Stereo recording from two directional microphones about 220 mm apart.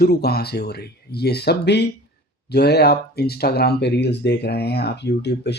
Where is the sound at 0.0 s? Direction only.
45° left (ahead or behind).